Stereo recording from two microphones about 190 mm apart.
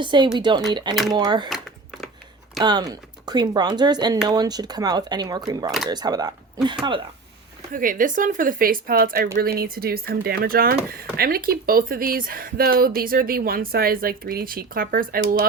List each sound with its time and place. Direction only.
0.0 s speech: 25° right (ahead or behind)
1.5 s typing: centre (ahead or behind)
2.6 s speech: 20° right (ahead or behind)
7.7 s speech: 45° right (ahead or behind)